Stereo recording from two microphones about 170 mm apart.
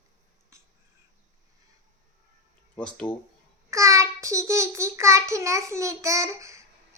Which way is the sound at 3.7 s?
20° right (ahead or behind).